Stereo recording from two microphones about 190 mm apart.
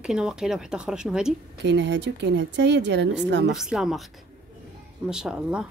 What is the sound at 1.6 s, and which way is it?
Speech, 65° right (ahead or behind).